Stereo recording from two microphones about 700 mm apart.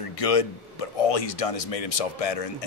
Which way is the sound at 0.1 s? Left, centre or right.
Left.